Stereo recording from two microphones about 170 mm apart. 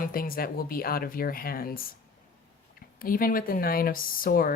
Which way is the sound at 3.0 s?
55° left (ahead or behind).